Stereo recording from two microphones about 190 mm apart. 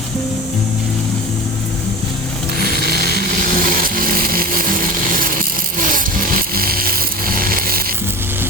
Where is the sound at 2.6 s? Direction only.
55° right (ahead or behind).